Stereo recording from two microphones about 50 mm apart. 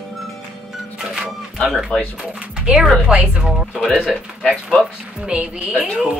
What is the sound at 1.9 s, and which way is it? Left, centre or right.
Speech, centre.